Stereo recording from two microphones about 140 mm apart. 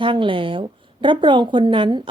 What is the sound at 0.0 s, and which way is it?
A woman's voice, 35° right (ahead or behind).